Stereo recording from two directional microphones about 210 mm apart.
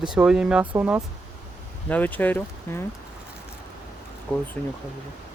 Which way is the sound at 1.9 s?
10° left (ahead or behind).